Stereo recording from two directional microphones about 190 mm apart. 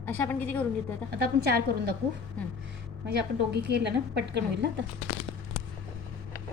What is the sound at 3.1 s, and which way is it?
A woman's voice, 60° right (ahead or behind).